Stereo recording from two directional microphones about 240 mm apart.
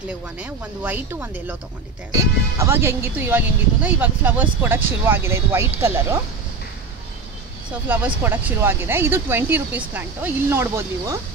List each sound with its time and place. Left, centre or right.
0.4 s speech: centre
2.6 s speech: centre
7.9 s speech: centre